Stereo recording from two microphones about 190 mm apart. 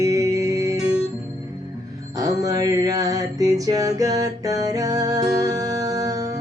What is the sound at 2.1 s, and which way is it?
Music, 20° right (ahead or behind).